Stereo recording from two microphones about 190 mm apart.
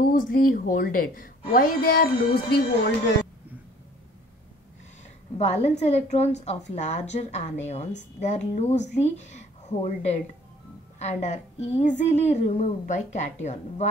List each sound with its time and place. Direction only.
0.0 s a woman's voice: 45° left (ahead or behind)
5.4 s a woman's voice: 35° left (ahead or behind)